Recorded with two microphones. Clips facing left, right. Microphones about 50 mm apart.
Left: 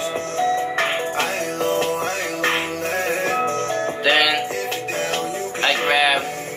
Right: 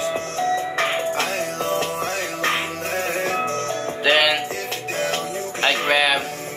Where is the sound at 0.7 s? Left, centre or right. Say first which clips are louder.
Even; centre.